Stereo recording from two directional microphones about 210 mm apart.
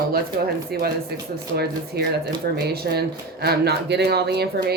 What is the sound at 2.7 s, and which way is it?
Speech, 50° right (ahead or behind).